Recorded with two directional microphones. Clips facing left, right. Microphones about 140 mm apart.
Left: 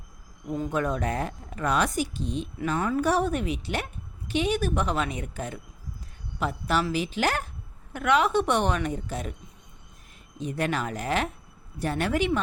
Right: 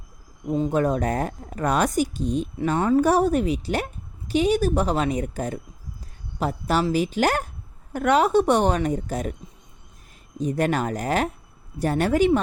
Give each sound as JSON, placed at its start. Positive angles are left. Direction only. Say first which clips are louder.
{"t": 0.4, "sound": "speech", "louder": "right 6 dB", "side_deg": -25}
{"t": 0.7, "sound": "speech", "louder": "right 4 dB", "side_deg": -35}
{"t": 2.6, "sound": "a woman's voice", "louder": "right 6 dB", "side_deg": -30}
{"t": 3.0, "sound": "a woman's voice", "louder": "right 5 dB", "side_deg": -40}
{"t": 10.3, "sound": "a woman's voice", "louder": "right 6 dB", "side_deg": -40}